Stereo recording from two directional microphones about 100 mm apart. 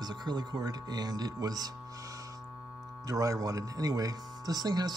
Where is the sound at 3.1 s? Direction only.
35° right (ahead or behind).